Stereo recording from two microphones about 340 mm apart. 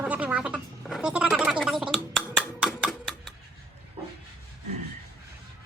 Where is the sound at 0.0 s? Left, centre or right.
Centre.